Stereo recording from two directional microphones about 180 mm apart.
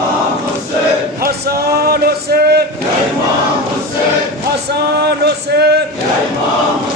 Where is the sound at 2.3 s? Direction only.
60° right (ahead or behind).